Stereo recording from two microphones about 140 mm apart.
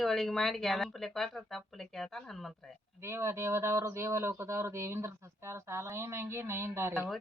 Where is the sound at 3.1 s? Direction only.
20° right (ahead or behind).